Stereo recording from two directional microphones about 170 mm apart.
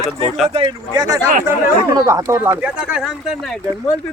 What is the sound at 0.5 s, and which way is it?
Speech, 25° right (ahead or behind).